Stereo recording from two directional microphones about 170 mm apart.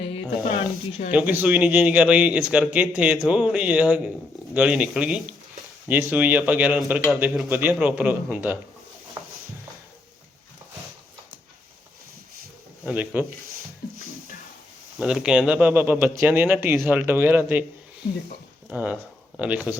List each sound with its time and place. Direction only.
0.0 s a sound: 35° left (ahead or behind)
1.1 s a man's voice: 10° right (ahead or behind)
12.8 s speech: 10° right (ahead or behind)
14.9 s a man's voice: 5° right (ahead or behind)
18.7 s a man's voice: 5° right (ahead or behind)